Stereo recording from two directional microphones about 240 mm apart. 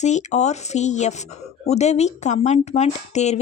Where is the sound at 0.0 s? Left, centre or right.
Left.